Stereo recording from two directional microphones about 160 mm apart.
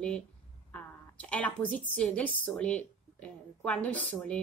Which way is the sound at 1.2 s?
10° left (ahead or behind).